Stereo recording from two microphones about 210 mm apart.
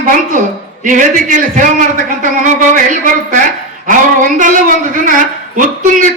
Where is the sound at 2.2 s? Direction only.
40° right (ahead or behind).